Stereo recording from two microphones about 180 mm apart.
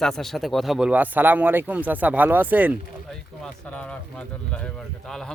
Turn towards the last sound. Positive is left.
turn(degrees=0)  # may be behind; listen again after turning